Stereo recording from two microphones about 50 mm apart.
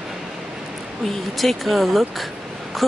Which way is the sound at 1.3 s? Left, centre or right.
Centre.